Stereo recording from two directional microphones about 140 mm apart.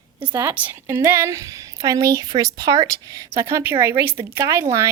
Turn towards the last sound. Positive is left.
turn(degrees=-20)  # may be behind; listen again after turning